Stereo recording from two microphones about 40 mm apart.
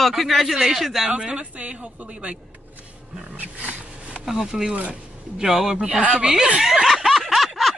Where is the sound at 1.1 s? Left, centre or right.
Right.